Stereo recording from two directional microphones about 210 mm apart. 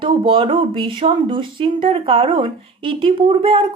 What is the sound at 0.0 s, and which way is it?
Speech, 25° right (ahead or behind).